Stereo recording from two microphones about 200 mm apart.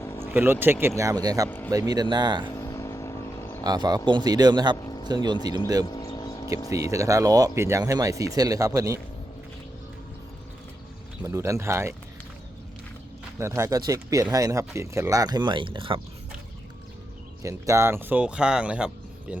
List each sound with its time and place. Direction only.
0.0 s a sound: 15° left (ahead or behind)
0.3 s speech: 10° right (ahead or behind)
1.5 s a man's voice: 10° left (ahead or behind)
1.9 s a man's voice: 20° right (ahead or behind)
2.6 s vehicle: 15° left (ahead or behind)
3.6 s a man's voice: 20° right (ahead or behind)
4.8 s a sound: 20° left (ahead or behind)
5.0 s a man's voice: 20° right (ahead or behind)
5.8 s vehicle: 20° left (ahead or behind)
6.9 s speech: 15° right (ahead or behind)
11.2 s speech: 15° right (ahead or behind)
13.4 s speech: 15° right (ahead or behind)
17.4 s speech: 15° right (ahead or behind)